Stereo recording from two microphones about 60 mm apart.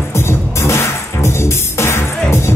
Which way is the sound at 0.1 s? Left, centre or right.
Left.